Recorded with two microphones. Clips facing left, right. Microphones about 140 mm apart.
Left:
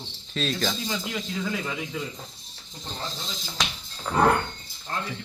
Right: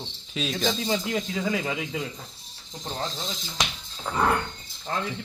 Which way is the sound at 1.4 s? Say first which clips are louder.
Right 1 dB; 70° right (ahead or behind).